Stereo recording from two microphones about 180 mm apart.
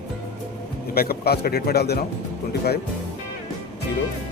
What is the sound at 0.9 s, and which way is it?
A man's voice, 55° left (ahead or behind).